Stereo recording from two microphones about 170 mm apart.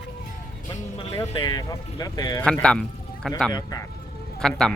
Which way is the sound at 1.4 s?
25° left (ahead or behind).